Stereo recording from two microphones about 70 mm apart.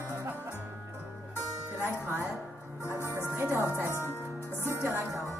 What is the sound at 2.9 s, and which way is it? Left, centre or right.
Music, right.